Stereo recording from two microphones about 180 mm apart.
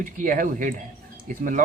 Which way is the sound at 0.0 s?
45° right (ahead or behind).